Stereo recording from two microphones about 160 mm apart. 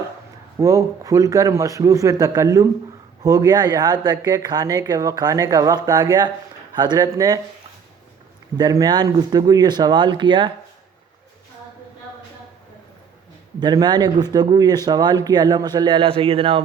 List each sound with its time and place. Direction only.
0.6 s speech: 20° right (ahead or behind)
8.5 s speech: 25° right (ahead or behind)
13.6 s speech: 25° right (ahead or behind)